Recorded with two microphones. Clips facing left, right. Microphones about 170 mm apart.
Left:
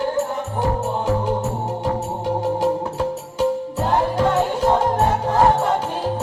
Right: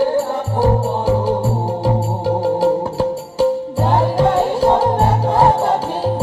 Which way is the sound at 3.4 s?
30° right (ahead or behind).